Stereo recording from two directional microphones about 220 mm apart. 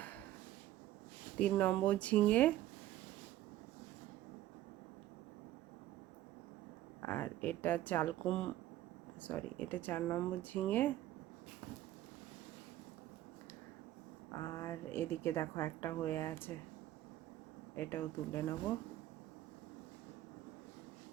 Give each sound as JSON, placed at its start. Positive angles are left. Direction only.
{"t": 1.4, "sound": "speech", "side_deg": 5}
{"t": 7.0, "sound": "speech", "side_deg": 10}
{"t": 14.3, "sound": "a woman's voice", "side_deg": 15}
{"t": 17.7, "sound": "speech", "side_deg": 10}